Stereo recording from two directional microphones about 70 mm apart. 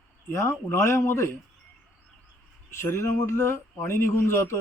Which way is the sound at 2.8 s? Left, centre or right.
Left.